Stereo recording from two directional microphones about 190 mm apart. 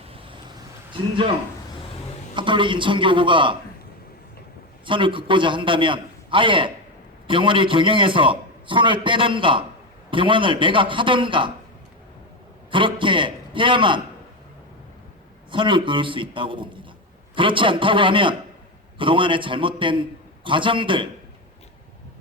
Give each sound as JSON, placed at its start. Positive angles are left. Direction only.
{"t": 2.3, "sound": "a man's voice", "side_deg": -25}
{"t": 4.9, "sound": "a man's voice", "side_deg": -25}
{"t": 12.7, "sound": "a man's voice", "side_deg": -25}
{"t": 15.5, "sound": "a man's voice", "side_deg": -25}